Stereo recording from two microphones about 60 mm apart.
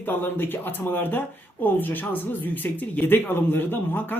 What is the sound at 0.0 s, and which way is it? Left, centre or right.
Speech, left.